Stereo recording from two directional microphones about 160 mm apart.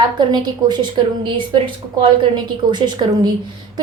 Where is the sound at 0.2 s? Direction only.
25° right (ahead or behind).